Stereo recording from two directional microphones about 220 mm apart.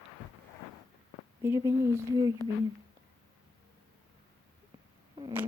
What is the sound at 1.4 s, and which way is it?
Speech, 10° right (ahead or behind).